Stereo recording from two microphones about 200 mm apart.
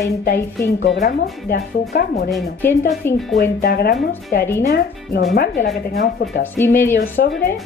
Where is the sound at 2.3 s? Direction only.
5° left (ahead or behind).